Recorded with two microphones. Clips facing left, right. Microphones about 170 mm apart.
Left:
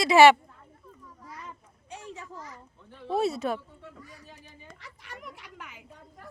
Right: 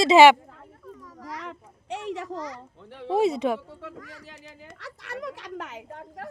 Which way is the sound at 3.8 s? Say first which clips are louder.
Right 6 dB; 90° right.